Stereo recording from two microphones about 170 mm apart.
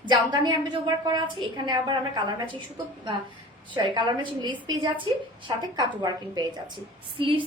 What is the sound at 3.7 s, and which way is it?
A woman's voice, 25° right (ahead or behind).